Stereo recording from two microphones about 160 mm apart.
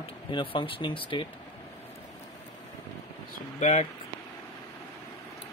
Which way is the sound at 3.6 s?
50° left (ahead or behind).